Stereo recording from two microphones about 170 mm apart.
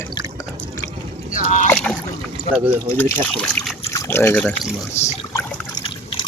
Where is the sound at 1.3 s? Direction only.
45° left (ahead or behind).